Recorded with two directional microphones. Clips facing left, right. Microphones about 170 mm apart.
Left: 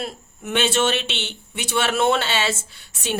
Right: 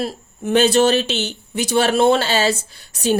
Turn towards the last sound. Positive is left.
turn(degrees=-40)  # may be behind; listen again after turning